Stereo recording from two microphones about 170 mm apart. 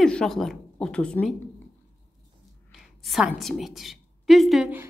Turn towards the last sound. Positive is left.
turn(degrees=-5)  # may be behind; listen again after turning